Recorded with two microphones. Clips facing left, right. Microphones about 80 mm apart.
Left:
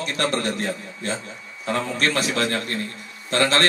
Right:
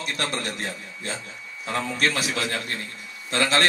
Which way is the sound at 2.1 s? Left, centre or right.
Left.